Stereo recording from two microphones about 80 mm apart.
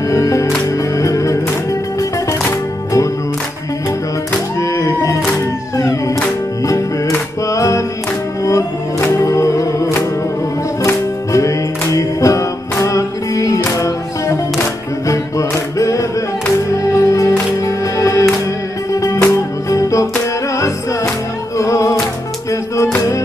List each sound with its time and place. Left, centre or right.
0.1 s music: left
4.6 s music: left
9.2 s music: left
10.9 s music: left